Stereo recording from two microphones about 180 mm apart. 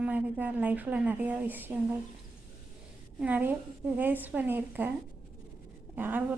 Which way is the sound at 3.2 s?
10° right (ahead or behind).